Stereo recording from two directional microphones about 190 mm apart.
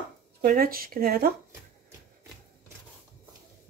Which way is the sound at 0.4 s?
50° right (ahead or behind).